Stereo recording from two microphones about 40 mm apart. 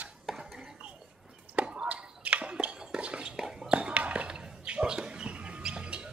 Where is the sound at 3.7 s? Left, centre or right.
Right.